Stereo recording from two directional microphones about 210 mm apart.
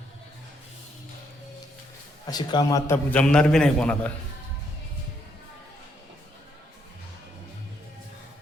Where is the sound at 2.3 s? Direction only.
20° left (ahead or behind).